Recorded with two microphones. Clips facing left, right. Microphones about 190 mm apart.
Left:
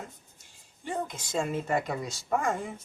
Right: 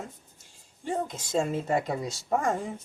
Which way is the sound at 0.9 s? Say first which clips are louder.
Right 3 dB; 40° right (ahead or behind).